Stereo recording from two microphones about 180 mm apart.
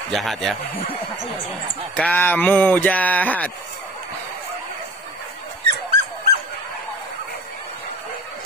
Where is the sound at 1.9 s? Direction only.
10° left (ahead or behind).